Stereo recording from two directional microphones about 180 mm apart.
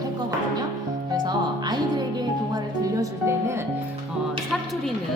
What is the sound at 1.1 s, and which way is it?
Speech, 25° right (ahead or behind).